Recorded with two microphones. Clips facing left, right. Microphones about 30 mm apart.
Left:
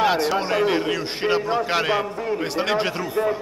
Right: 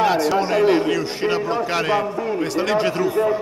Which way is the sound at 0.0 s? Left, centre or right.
Centre.